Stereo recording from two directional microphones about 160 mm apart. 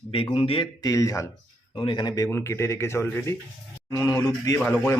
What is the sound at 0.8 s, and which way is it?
Speech, 20° left (ahead or behind).